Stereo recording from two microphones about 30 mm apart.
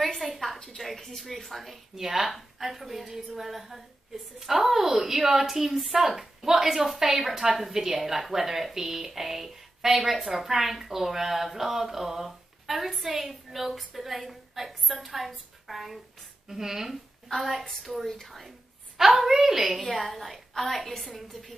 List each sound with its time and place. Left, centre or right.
0.2 s a woman's voice: centre
2.0 s a woman's voice: centre
16.4 s a woman's voice: centre
17.3 s a woman's voice: centre
18.9 s a woman's voice: centre
19.9 s a woman's voice: centre